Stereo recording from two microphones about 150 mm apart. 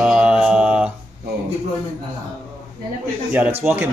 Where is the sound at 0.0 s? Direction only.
5° right (ahead or behind).